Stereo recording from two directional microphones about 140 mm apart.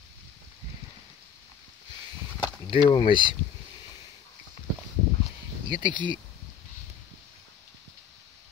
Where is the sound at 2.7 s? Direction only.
40° left (ahead or behind).